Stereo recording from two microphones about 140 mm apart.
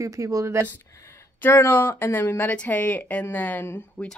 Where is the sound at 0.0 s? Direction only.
25° right (ahead or behind).